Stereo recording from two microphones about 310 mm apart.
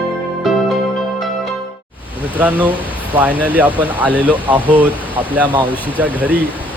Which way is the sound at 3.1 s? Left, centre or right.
Centre.